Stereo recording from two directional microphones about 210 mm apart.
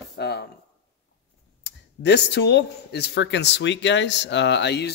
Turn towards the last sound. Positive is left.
turn(degrees=55)  # may be behind; listen again after turning